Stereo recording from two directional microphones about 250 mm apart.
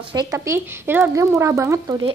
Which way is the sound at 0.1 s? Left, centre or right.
Centre.